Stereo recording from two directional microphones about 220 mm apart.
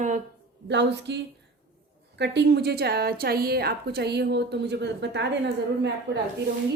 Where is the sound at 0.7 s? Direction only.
50° right (ahead or behind).